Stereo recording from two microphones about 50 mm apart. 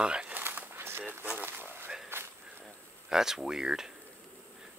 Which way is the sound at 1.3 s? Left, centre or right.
Right.